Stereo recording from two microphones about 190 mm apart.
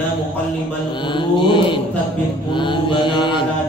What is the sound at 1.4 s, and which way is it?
Mantra, 25° left (ahead or behind).